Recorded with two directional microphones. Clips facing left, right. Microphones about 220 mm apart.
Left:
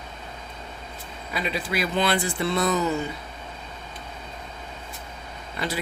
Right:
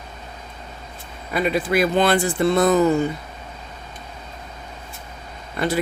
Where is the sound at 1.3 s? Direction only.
50° right (ahead or behind).